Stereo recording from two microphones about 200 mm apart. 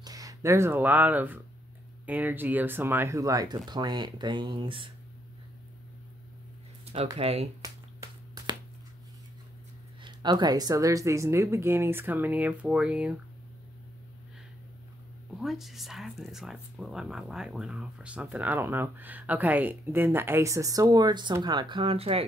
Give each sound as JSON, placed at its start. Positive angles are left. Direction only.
{"t": 0.0, "sound": "speech", "side_deg": -20}
{"t": 7.2, "sound": "speech", "side_deg": -30}
{"t": 7.6, "sound": "finger snapping", "side_deg": -20}
{"t": 10.0, "sound": "speech", "side_deg": -20}
{"t": 15.3, "sound": "speech", "side_deg": 0}